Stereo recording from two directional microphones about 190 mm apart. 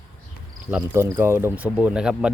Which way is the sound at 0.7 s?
10° right (ahead or behind).